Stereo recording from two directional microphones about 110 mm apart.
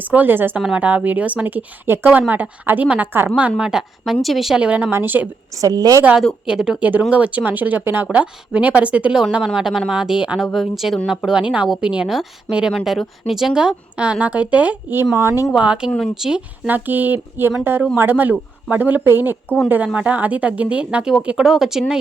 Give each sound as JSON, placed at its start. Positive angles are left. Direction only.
{"t": 0.0, "sound": "speech", "side_deg": -15}
{"t": 5.5, "sound": "a woman's voice", "side_deg": -35}
{"t": 6.4, "sound": "speech", "side_deg": -5}
{"t": 15.1, "sound": "speech", "side_deg": -25}
{"t": 15.5, "sound": "speech", "side_deg": -10}
{"t": 16.6, "sound": "speech", "side_deg": -15}